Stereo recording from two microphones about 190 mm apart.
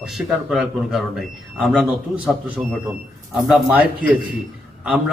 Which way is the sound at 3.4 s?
5° right (ahead or behind).